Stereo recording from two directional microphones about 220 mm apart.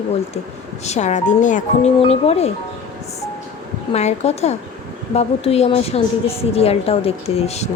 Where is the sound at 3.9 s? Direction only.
30° left (ahead or behind).